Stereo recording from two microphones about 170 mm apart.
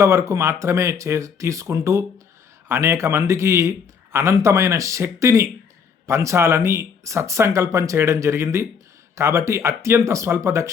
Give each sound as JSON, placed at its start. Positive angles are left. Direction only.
{"t": 0.0, "sound": "a man's voice", "side_deg": -15}